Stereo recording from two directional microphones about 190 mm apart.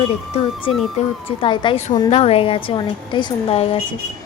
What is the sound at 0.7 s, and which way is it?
A woman's voice, 30° left (ahead or behind).